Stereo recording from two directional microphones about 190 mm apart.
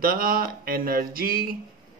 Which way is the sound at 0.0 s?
50° right (ahead or behind).